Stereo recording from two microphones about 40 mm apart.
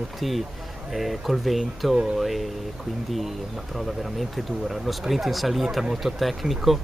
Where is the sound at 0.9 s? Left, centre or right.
Centre.